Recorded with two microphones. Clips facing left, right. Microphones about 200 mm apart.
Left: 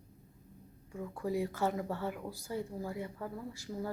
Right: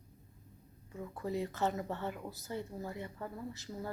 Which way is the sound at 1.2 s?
10° left (ahead or behind).